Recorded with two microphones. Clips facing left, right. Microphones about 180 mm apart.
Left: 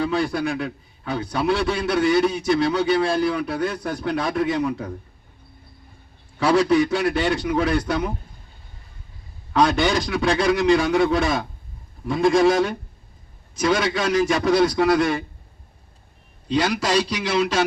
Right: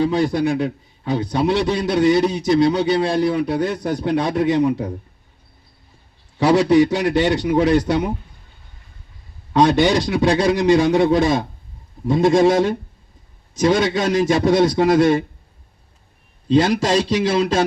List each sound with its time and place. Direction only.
0.0 s a man's voice: 30° right (ahead or behind)
2.1 s a man's voice: 30° right (ahead or behind)
6.4 s a man's voice: 35° right (ahead or behind)
9.5 s a man's voice: 25° right (ahead or behind)
16.6 s a man's voice: 30° right (ahead or behind)